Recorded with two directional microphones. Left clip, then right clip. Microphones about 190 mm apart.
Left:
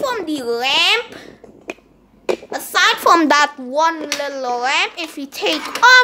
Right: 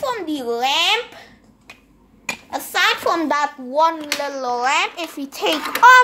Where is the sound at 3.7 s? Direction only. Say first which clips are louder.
Left 1 dB; 15° left (ahead or behind).